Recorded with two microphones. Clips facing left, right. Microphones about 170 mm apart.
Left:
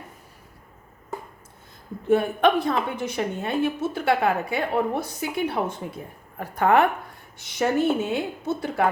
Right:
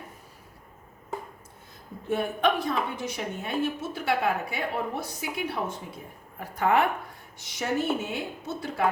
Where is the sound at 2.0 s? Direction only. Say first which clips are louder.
Left 6 dB; 60° left (ahead or behind).